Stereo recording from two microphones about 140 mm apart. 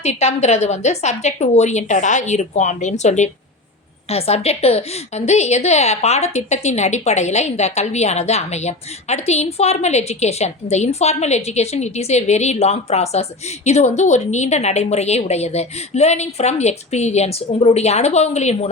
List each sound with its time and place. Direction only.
0.0 s a woman's voice: 50° left (ahead or behind)